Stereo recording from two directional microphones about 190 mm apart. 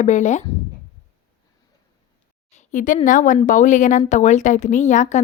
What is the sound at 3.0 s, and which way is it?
A woman's voice, 40° left (ahead or behind).